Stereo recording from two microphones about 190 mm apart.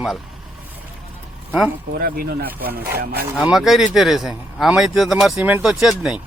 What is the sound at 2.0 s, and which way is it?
Speech, 50° right (ahead or behind).